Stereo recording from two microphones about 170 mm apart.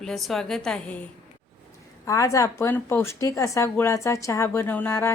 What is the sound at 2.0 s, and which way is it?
Speech, 20° left (ahead or behind).